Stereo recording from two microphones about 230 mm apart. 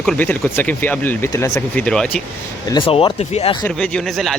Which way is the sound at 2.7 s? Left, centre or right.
Left.